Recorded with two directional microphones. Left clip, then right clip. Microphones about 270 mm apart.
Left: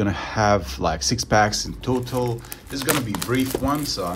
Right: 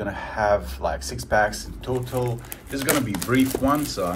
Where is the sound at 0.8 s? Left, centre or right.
Left.